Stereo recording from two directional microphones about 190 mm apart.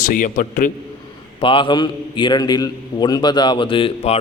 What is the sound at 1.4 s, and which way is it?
A man's voice, 25° left (ahead or behind).